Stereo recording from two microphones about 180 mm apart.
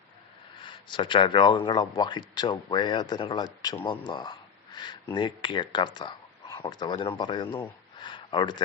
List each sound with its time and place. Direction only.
0.6 s speech: 25° left (ahead or behind)